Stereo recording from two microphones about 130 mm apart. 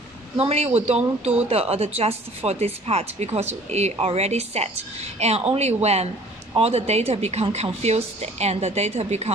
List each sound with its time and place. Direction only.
0.4 s a woman's voice: 50° right (ahead or behind)